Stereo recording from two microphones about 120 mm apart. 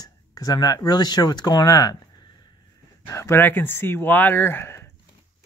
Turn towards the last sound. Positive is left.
turn(degrees=20)  # may be behind; listen again after turning